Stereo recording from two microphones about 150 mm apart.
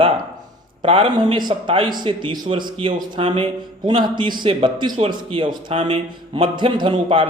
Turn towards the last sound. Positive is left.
turn(degrees=-35)  # may be behind; listen again after turning